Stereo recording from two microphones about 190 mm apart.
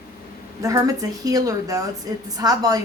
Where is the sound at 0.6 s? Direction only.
20° right (ahead or behind).